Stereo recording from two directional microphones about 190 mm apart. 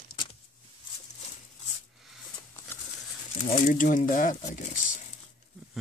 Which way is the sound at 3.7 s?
45° left (ahead or behind).